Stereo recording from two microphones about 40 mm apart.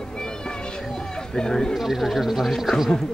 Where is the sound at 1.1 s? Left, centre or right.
Centre.